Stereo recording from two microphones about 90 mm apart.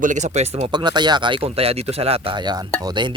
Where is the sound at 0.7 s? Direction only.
55° right (ahead or behind); by 2.4 s 90° right.